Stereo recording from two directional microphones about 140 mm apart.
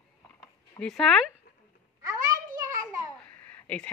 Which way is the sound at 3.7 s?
5° left (ahead or behind).